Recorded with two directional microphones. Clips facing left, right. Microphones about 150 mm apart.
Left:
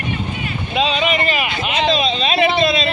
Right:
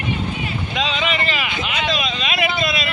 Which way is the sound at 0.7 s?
15° left (ahead or behind).